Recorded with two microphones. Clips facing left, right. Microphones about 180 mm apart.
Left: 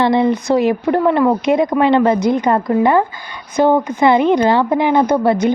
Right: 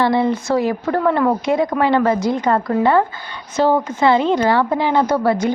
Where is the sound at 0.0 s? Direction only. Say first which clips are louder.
Left 3 dB; 20° left (ahead or behind).